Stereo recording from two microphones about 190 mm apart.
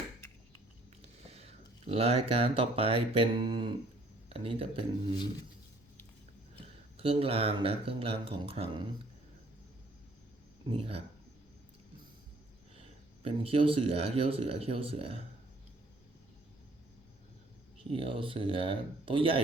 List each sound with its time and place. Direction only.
1.0 s speech: 35° right (ahead or behind)
6.9 s speech: 30° right (ahead or behind)
10.7 s speech: 30° right (ahead or behind)
12.7 s speech: 30° right (ahead or behind)
17.9 s speech: 30° right (ahead or behind)